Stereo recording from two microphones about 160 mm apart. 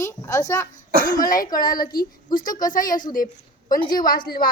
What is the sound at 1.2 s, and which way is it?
A woman's voice, 60° left (ahead or behind).